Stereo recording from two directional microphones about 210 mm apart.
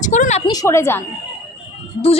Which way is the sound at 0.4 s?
15° left (ahead or behind).